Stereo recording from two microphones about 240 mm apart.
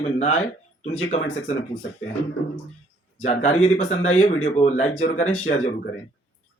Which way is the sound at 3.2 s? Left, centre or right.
Left.